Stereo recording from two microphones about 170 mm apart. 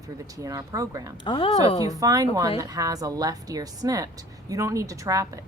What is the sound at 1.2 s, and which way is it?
Speech, 30° left (ahead or behind).